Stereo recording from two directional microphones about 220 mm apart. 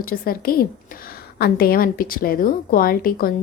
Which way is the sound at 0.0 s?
40° left (ahead or behind).